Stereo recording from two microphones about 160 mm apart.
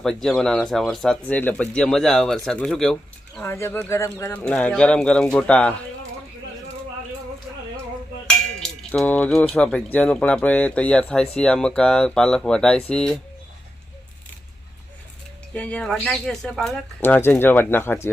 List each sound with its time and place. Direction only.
0.0 s speech: centre (ahead or behind)
3.5 s speech: 15° left (ahead or behind)
8.5 s speech: 5° left (ahead or behind)
15.5 s speech: 10° left (ahead or behind)
17.0 s speech: 15° left (ahead or behind)